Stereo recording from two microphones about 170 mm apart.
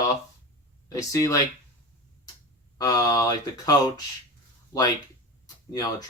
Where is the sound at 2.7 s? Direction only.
20° left (ahead or behind).